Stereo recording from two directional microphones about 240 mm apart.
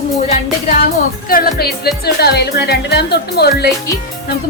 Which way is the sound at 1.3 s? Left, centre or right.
Left.